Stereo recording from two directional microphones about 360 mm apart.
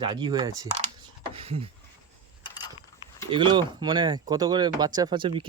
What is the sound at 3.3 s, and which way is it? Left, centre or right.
Speech, centre.